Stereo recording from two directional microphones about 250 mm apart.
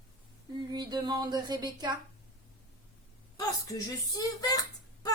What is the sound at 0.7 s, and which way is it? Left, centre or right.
A woman's voice, centre.